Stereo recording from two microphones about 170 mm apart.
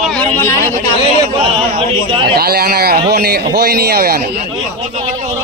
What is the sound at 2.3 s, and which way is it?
A man's voice, 65° right (ahead or behind).